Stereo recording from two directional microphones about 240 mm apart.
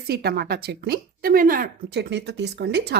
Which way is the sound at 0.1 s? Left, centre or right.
Right.